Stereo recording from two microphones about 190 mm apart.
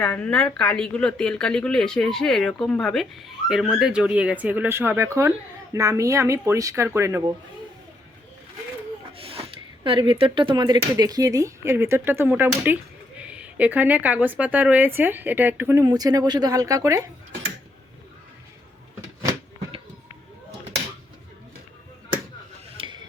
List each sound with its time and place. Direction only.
0.0 s speech: 5° left (ahead or behind); by 7.3 s 15° right (ahead or behind)
9.1 s speech: 30° right (ahead or behind)
22.8 s a sound: 30° right (ahead or behind)